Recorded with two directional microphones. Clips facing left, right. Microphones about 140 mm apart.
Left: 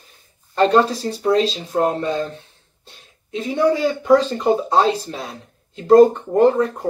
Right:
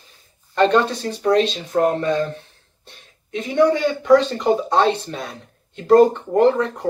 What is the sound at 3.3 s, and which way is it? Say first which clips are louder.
Speech: right 1 dB; 30° left (ahead or behind).